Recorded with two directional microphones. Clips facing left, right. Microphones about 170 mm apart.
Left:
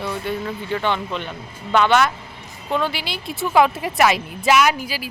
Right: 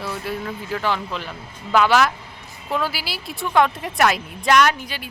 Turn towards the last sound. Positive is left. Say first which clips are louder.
# left 1 dB
turn(degrees=5)  # may be behind; listen again after turning